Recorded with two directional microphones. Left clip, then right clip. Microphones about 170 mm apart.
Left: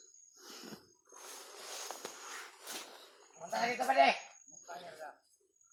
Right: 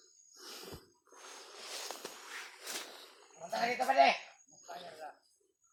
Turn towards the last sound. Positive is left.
turn(degrees=0)  # may be behind; listen again after turning